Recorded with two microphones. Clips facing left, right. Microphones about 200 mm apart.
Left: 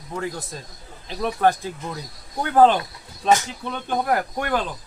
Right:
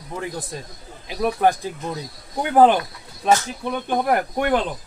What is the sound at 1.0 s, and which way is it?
Speech, 10° right (ahead or behind).